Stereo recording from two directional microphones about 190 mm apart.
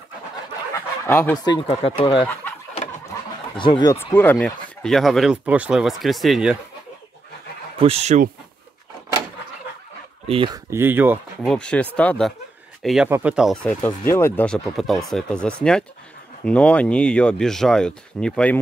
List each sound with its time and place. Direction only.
1.0 s speech: 10° left (ahead or behind)
1.4 s speech: 25° left (ahead or behind)
3.5 s speech: 25° left (ahead or behind)
4.1 s speech: 10° left (ahead or behind)
7.8 s speech: 35° right (ahead or behind)
10.2 s speech: 25° right (ahead or behind)
10.7 s speech: 10° right (ahead or behind)
11.4 s speech: 5° left (ahead or behind)